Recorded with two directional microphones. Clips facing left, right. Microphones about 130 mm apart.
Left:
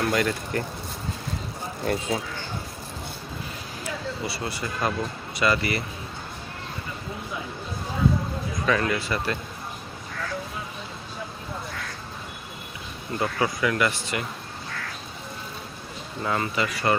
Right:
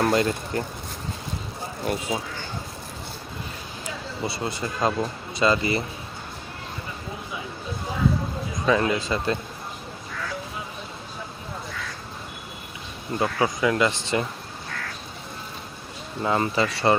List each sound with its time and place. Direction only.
0.0 s speech: 25° right (ahead or behind)
1.8 s speech: 20° right (ahead or behind)
3.8 s speech: 25° right (ahead or behind)
8.6 s speech: 20° right (ahead or behind)
13.1 s speech: 20° right (ahead or behind)
16.2 s speech: 25° right (ahead or behind)